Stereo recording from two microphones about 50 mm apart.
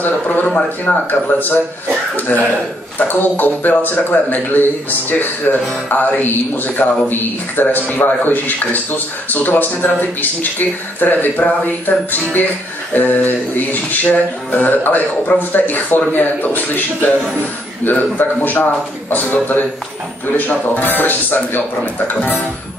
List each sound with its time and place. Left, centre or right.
0.0 s speech: left
0.5 s speech: left
3.0 s speech: left
22.1 s speech: left